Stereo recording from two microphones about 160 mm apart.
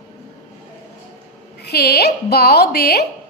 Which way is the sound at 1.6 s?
90° left.